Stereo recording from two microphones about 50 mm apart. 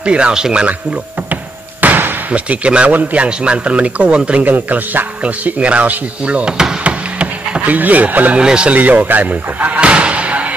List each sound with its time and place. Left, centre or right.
0.0 s speech: right
1.3 s basketball bounce: right
2.3 s speech: right
5.2 s speech: right
6.8 s a sound: right
8.4 s speech: centre
8.7 s speech: right